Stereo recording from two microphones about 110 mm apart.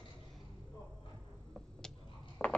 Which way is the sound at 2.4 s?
10° left (ahead or behind).